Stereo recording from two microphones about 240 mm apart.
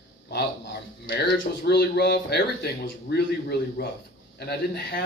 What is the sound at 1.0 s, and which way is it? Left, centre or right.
Speech, left.